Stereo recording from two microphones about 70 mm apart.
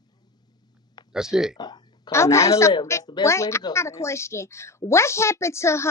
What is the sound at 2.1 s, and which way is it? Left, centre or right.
A woman's voice, left.